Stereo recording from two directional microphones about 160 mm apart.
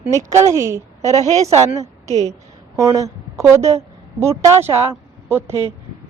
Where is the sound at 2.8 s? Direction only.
20° right (ahead or behind).